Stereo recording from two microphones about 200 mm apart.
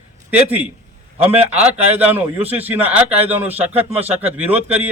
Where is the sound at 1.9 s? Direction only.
10° right (ahead or behind).